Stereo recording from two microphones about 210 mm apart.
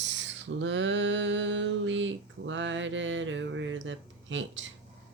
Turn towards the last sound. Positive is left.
turn(degrees=-60)  # may be behind; listen again after turning